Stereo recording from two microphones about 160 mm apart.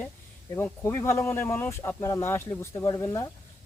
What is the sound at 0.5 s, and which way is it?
Speech, 10° left (ahead or behind).